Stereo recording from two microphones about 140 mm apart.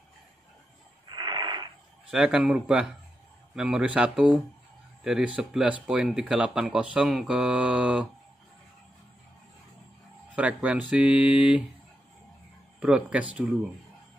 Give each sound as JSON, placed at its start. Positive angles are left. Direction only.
{"t": 1.0, "sound": "wheeze", "side_deg": -35}
{"t": 2.0, "sound": "speech", "side_deg": -5}
{"t": 10.3, "sound": "speech", "side_deg": -10}
{"t": 12.8, "sound": "speech", "side_deg": -5}